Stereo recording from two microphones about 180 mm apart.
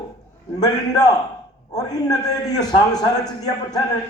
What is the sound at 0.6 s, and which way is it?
A man's voice, 20° left (ahead or behind).